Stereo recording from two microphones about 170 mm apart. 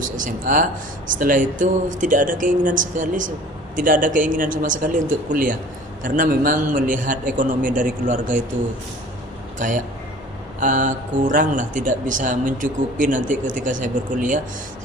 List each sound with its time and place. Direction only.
0.0 s speech: 50° right (ahead or behind)
9.6 s a man's voice: 50° right (ahead or behind)